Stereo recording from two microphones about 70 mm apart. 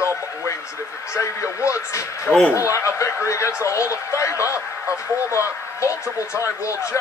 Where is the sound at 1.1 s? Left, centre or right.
Left.